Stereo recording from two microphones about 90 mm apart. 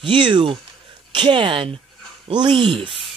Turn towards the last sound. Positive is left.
turn(degrees=-80)